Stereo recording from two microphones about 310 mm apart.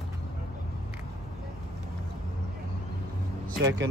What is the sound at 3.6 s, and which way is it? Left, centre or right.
Speech, right.